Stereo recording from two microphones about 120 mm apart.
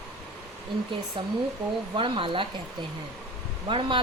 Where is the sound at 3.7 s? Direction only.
45° right (ahead or behind).